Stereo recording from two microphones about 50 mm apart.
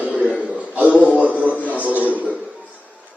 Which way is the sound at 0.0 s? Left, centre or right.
Right.